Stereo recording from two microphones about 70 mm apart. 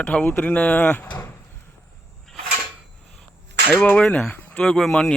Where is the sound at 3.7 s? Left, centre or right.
Left.